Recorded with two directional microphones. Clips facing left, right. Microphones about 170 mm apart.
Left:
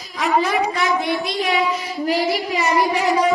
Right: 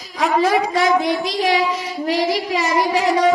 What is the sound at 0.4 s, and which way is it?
Child singing, 90° right.